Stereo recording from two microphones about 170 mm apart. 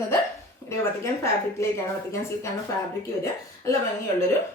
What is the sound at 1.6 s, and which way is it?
Speech, 15° left (ahead or behind).